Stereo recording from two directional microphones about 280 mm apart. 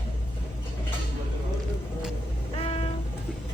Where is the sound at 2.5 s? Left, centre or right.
Centre.